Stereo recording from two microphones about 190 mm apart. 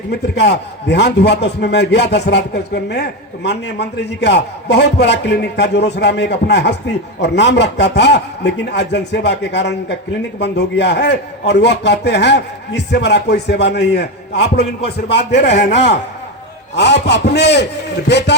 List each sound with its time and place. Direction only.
0.1 s a man's voice: 60° left (ahead or behind)
15.4 s speech: 35° left (ahead or behind)
16.7 s a man's voice: 65° left (ahead or behind)